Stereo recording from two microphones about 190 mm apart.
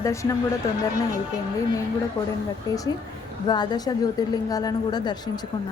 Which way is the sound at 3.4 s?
20° left (ahead or behind).